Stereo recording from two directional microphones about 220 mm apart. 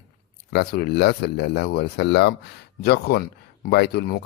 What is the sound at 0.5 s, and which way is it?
Speech, 45° left (ahead or behind).